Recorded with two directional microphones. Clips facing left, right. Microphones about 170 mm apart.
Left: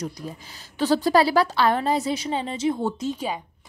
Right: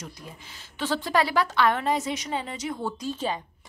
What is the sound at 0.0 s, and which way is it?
A woman's voice, 40° left (ahead or behind).